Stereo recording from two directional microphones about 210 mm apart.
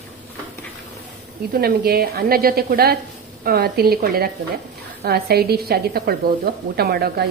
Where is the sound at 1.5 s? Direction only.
45° right (ahead or behind).